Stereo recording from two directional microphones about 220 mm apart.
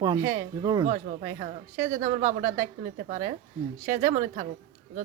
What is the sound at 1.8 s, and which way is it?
A woman's voice, 35° right (ahead or behind).